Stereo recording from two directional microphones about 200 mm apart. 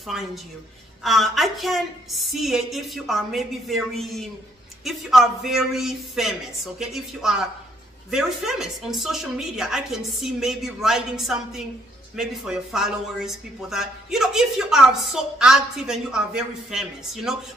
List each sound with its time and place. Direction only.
0.1 s speech: centre (ahead or behind)